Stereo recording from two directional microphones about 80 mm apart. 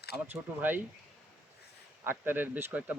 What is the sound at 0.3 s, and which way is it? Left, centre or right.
Speech, right.